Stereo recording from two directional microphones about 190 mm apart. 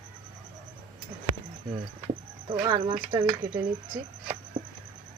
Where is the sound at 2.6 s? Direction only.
30° right (ahead or behind).